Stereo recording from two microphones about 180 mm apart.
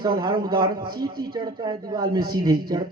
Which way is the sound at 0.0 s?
25° right (ahead or behind).